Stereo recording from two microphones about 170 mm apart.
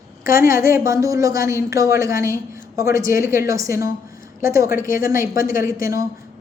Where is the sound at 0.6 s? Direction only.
15° right (ahead or behind).